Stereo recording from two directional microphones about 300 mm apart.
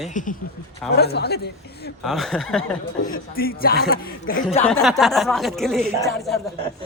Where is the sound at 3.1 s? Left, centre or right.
Left.